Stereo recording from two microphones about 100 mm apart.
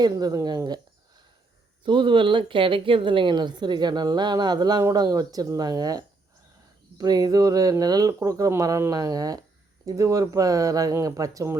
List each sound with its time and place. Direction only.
0.0 s speech: 40° right (ahead or behind)
1.8 s a woman's voice: 55° right (ahead or behind); by 11.5 s 35° right (ahead or behind)